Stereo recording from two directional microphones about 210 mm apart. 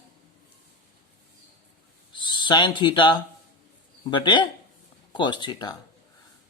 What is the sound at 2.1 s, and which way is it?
Speech, 20° left (ahead or behind).